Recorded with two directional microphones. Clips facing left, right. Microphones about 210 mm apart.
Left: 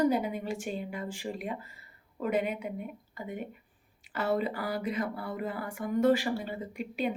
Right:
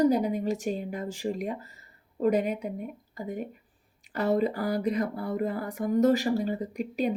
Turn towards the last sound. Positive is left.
turn(degrees=-40)  # may be behind; listen again after turning